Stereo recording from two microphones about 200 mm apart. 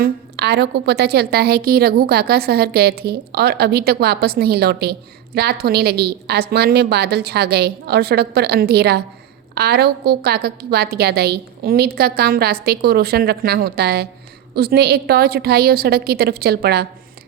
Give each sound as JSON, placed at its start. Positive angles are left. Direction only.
{"t": 0.0, "sound": "a woman's voice", "side_deg": -55}